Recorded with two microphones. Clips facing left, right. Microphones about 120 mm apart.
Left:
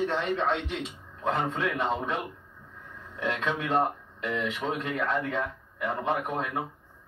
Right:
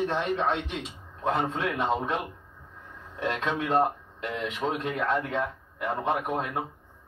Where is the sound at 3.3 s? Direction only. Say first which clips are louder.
Right 1 dB; 25° right (ahead or behind).